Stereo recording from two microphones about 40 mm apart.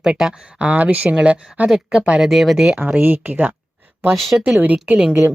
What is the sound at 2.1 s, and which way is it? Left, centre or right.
Speech, centre.